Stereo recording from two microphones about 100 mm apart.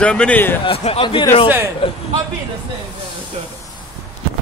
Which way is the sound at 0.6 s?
75° left (ahead or behind).